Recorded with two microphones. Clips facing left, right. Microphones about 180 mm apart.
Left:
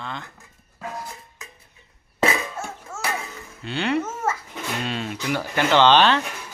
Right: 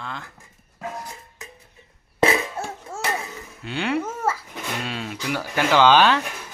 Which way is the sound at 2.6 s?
30° right (ahead or behind).